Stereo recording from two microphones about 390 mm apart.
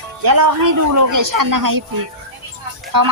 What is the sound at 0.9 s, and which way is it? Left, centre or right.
Speech, right.